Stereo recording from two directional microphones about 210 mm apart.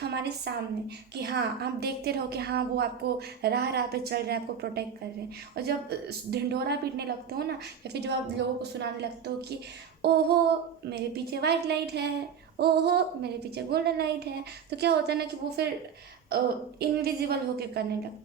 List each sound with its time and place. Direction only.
0.0 s a woman's voice: 50° right (ahead or behind)
16.8 s a woman's voice: 50° right (ahead or behind)